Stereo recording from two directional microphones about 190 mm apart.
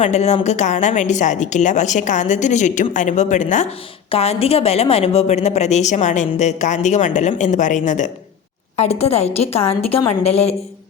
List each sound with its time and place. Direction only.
0.0 s a woman's voice: 35° left (ahead or behind)